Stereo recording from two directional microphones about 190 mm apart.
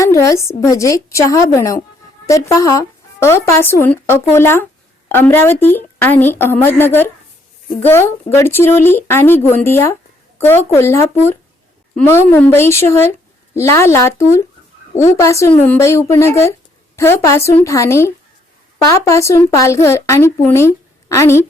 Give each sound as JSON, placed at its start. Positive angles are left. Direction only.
{"t": 0.0, "sound": "speech", "side_deg": 15}